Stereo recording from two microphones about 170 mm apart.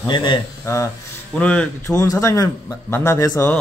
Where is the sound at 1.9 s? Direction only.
20° left (ahead or behind).